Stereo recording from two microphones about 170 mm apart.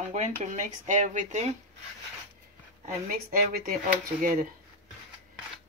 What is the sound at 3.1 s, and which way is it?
Speech, 55° right (ahead or behind).